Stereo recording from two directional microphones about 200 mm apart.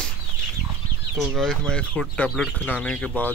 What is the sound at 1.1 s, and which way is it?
Speech, centre (ahead or behind).